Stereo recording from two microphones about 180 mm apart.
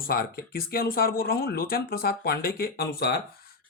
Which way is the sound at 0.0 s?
55° left (ahead or behind).